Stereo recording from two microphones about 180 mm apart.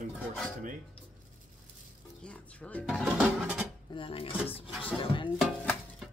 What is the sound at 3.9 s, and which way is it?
Dishes, 30° left (ahead or behind).